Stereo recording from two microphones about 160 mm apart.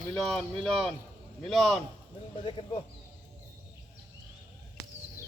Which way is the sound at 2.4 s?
30° left (ahead or behind).